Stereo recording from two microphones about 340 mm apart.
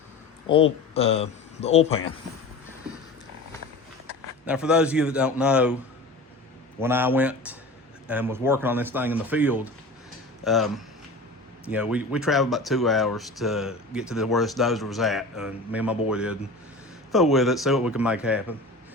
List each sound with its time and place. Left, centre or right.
0.4 s speech: centre
4.4 s speech: centre
6.7 s speech: centre